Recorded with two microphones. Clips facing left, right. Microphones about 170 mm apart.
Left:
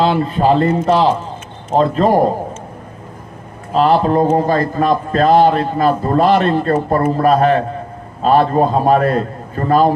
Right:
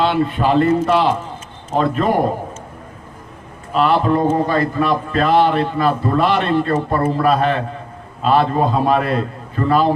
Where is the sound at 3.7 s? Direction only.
35° left (ahead or behind).